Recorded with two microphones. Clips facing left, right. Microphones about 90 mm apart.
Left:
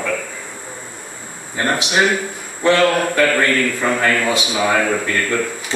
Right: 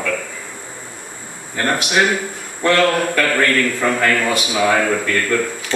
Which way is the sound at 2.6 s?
15° left (ahead or behind).